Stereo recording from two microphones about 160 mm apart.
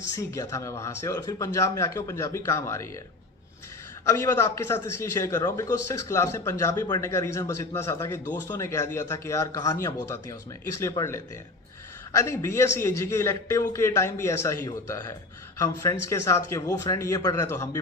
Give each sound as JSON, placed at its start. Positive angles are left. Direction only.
{"t": 0.2, "sound": "a man's voice", "side_deg": 20}
{"t": 4.0, "sound": "a man's voice", "side_deg": 20}